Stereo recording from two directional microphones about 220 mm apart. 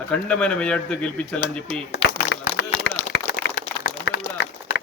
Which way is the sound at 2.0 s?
55° left (ahead or behind).